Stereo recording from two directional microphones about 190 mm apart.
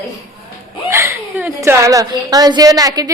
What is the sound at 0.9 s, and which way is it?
A woman's voice, 15° right (ahead or behind).